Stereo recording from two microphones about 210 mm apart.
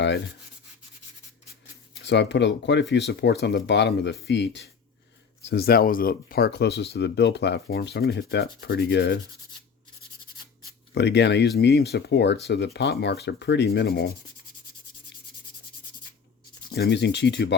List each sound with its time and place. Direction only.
2.0 s speech: 55° left (ahead or behind)
10.9 s speech: 55° left (ahead or behind)
16.7 s speech: 55° left (ahead or behind)